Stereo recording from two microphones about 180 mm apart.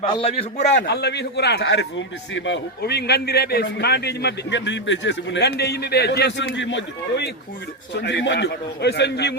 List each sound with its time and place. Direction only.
0.1 s a man's voice: 30° left (ahead or behind)
0.5 s a man's voice: 75° left (ahead or behind); by 7.3 s 90° left
7.9 s a man's voice: 70° left (ahead or behind)